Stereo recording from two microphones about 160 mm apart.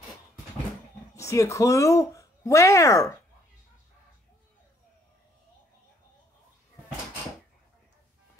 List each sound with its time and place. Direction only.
1.1 s speech: 20° left (ahead or behind)